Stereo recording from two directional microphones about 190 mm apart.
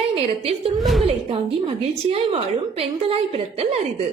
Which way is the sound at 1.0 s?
30° right (ahead or behind).